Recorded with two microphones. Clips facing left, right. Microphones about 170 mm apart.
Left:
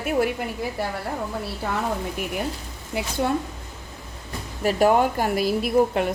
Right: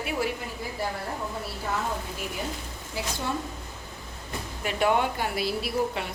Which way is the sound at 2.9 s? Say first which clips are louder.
Left 6 dB; 60° left (ahead or behind).